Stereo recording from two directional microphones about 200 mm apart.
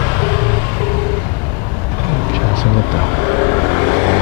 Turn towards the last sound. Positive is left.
turn(degrees=20)  # may be behind; listen again after turning